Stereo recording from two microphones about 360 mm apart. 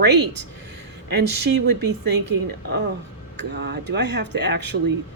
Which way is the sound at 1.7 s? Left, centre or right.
Right.